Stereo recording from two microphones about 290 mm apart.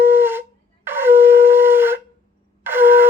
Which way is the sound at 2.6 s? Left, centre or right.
Centre.